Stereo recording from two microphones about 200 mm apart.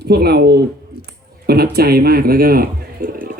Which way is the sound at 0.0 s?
55° right (ahead or behind).